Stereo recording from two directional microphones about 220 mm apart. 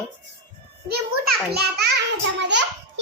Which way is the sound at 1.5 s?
45° right (ahead or behind).